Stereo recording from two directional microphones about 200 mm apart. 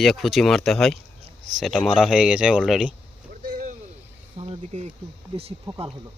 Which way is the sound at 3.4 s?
45° right (ahead or behind).